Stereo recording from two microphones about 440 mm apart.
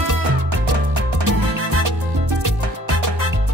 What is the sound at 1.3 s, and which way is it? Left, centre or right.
Music, right.